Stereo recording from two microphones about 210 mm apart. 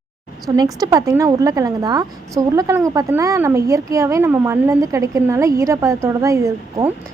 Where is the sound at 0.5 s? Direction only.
20° right (ahead or behind).